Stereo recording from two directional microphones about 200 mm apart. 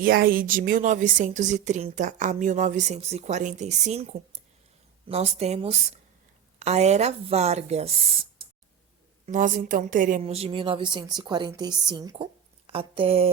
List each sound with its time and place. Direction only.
0.0 s a woman's voice: 45° right (ahead or behind); by 8.4 s 25° right (ahead or behind)
9.2 s a woman's voice: 40° right (ahead or behind)